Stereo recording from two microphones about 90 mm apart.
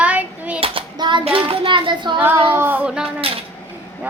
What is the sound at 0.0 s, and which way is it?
Child singing, 15° right (ahead or behind).